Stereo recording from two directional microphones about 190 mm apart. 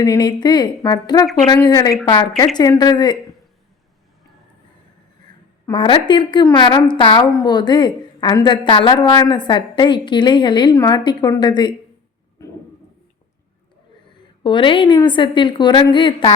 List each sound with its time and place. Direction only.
0.0 s a woman's voice: 20° left (ahead or behind)
5.6 s a woman's voice: 25° left (ahead or behind)
12.4 s a sound: 15° left (ahead or behind)
14.4 s a woman's voice: 25° left (ahead or behind)